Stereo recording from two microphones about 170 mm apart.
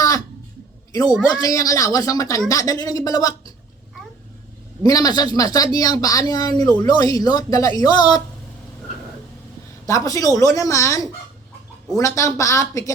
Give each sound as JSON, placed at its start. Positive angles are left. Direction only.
{"t": 1.4, "sound": "a woman's voice", "side_deg": 20}
{"t": 4.8, "sound": "a woman's voice", "side_deg": 20}
{"t": 9.8, "sound": "a woman's voice", "side_deg": 20}